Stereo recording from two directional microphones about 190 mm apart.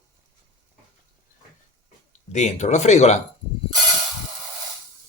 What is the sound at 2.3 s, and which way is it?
Speech, 40° left (ahead or behind).